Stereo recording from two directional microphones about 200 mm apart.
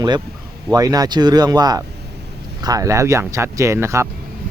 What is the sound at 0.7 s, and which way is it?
Speech, 15° right (ahead or behind).